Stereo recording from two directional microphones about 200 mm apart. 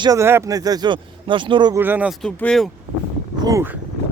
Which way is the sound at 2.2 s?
5° left (ahead or behind).